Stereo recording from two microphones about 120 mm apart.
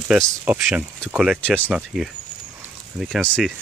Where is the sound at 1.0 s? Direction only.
5° right (ahead or behind).